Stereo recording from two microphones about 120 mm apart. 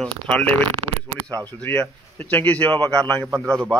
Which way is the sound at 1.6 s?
10° left (ahead or behind).